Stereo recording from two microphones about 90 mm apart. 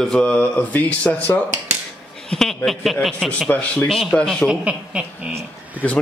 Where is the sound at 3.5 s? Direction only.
15° left (ahead or behind).